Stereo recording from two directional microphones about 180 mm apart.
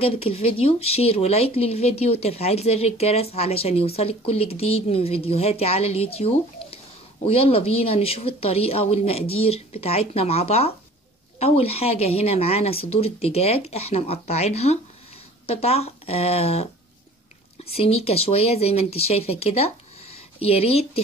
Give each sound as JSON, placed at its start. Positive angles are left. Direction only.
{"t": 0.0, "sound": "speech", "side_deg": 35}
{"t": 17.6, "sound": "speech", "side_deg": 35}